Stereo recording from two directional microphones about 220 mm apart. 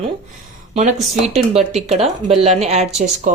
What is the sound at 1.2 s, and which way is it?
Speech, 30° right (ahead or behind).